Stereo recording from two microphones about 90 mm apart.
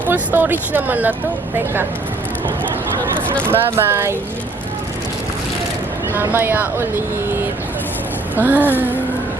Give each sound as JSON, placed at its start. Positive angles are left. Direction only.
{"t": 0.1, "sound": "speech", "side_deg": -20}
{"t": 3.4, "sound": "speech", "side_deg": -25}
{"t": 6.1, "sound": "speech", "side_deg": -25}
{"t": 8.4, "sound": "speech", "side_deg": -20}